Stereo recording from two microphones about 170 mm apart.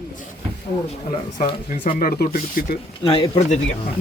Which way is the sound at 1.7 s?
50° left (ahead or behind).